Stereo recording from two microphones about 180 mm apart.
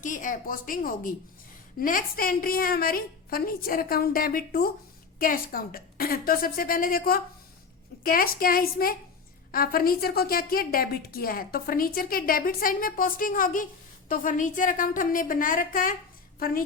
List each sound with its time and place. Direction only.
0.0 s a woman's voice: 45° left (ahead or behind)